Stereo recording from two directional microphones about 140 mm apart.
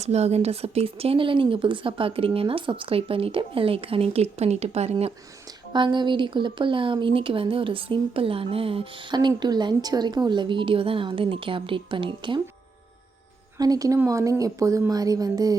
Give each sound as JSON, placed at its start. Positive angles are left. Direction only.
{"t": 0.0, "sound": "speech", "side_deg": -50}
{"t": 5.7, "sound": "speech", "side_deg": -35}
{"t": 13.6, "sound": "a woman's voice", "side_deg": -25}